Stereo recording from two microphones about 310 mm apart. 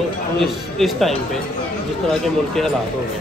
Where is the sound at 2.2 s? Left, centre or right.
Centre.